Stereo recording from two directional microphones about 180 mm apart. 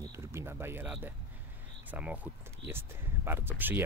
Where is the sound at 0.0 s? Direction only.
15° right (ahead or behind).